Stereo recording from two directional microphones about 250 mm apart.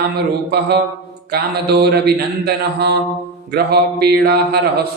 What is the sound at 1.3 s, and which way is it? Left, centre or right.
Mantra, right.